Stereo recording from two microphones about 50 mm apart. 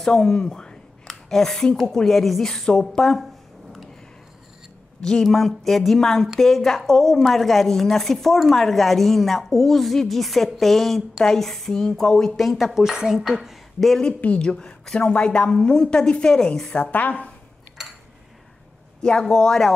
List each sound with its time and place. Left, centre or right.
0.0 s a woman's voice: centre
5.0 s a woman's voice: centre
12.4 s speech: centre
14.2 s a woman's voice: left
16.9 s speech: left
19.2 s a woman's voice: centre